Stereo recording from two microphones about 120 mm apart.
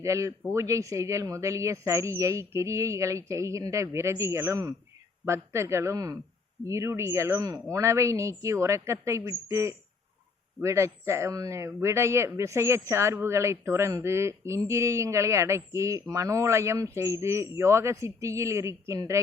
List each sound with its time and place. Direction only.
0.0 s speech: 25° right (ahead or behind)